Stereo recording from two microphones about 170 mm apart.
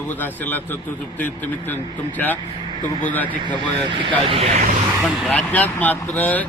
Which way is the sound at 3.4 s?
30° right (ahead or behind).